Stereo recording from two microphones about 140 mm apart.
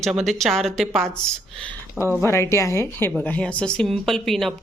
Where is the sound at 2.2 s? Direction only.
20° left (ahead or behind).